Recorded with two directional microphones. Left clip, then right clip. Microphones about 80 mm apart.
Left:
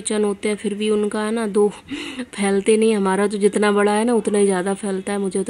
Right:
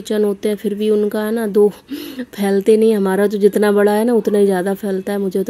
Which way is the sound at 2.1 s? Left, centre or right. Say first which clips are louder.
Right 3 dB; centre.